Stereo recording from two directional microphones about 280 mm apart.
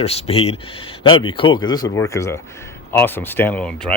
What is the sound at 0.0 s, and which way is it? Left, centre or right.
Speech, left.